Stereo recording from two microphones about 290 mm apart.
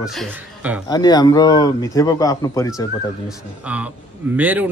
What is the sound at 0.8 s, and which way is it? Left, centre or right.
A man's voice, centre.